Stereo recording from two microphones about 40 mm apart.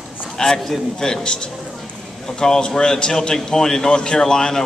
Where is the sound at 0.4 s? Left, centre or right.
Centre.